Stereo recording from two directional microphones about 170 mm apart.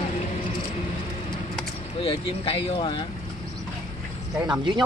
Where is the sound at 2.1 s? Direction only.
30° left (ahead or behind).